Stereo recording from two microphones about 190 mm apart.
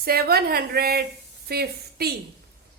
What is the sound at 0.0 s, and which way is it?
A woman's voice, 55° right (ahead or behind).